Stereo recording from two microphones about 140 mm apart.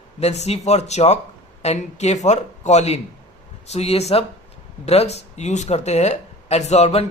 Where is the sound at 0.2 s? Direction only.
50° left (ahead or behind).